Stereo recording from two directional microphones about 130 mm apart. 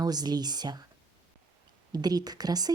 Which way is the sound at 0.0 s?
30° right (ahead or behind).